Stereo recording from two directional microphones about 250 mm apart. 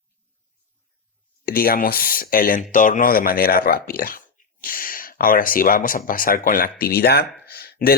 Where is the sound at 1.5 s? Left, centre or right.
Left.